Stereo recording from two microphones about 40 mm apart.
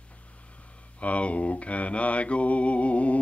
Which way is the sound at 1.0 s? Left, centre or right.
Left.